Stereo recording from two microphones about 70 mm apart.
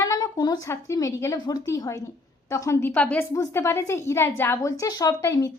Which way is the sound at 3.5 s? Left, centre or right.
Left.